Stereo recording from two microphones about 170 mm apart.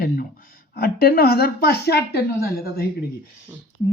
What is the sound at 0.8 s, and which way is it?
A woman's voice, 60° left (ahead or behind).